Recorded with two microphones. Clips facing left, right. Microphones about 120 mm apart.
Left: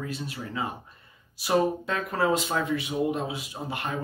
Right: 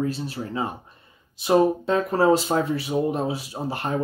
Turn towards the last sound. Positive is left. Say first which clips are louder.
# right 5 dB
turn(degrees=-35)  # may be behind; listen again after turning